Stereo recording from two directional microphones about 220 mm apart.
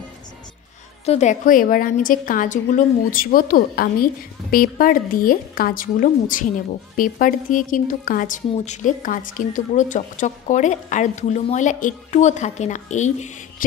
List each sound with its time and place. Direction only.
1.0 s a woman's voice: 30° left (ahead or behind)